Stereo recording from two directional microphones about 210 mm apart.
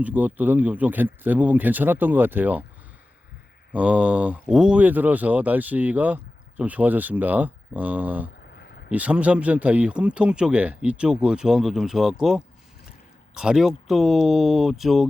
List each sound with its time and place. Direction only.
0.0 s speech: 5° right (ahead or behind)
3.7 s speech: 5° right (ahead or behind)
8.5 s a sound: 50° left (ahead or behind)
8.9 s speech: 5° right (ahead or behind)